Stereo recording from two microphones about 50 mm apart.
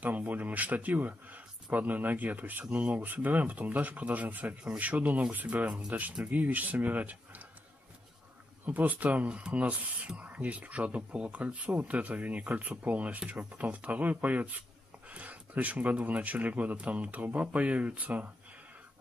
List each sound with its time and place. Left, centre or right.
0.0 s speech: right
8.6 s speech: right